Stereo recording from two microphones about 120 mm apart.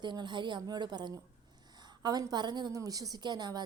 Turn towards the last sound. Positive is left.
turn(degrees=-35)  # may be behind; listen again after turning